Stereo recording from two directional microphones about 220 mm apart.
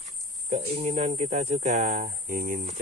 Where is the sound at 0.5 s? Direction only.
30° right (ahead or behind).